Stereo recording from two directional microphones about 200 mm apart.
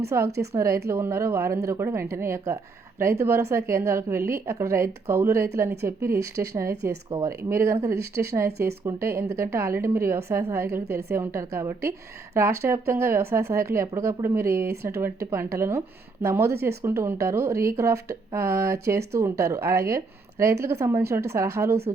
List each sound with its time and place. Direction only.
0.1 s a woman's voice: 15° right (ahead or behind)